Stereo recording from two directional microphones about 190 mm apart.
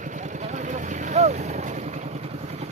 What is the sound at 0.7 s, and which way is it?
Vehicle, 35° right (ahead or behind).